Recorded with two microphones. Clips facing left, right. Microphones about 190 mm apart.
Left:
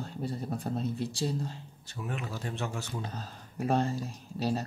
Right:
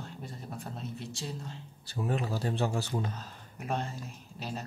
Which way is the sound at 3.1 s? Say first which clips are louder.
Left 6 dB; 35° left (ahead or behind).